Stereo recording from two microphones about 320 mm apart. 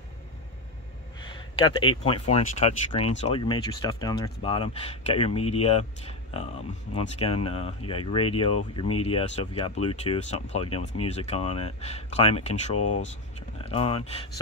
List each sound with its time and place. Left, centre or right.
1.2 s speech: centre